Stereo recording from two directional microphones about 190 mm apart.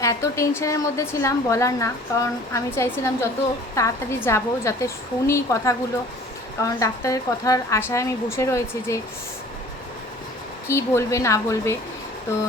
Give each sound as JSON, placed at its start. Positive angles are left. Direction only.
{"t": 0.0, "sound": "a woman's voice", "side_deg": 15}
{"t": 10.7, "sound": "a woman's voice", "side_deg": 15}